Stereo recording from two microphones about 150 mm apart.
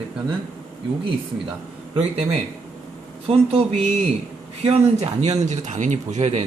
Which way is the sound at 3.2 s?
40° right (ahead or behind).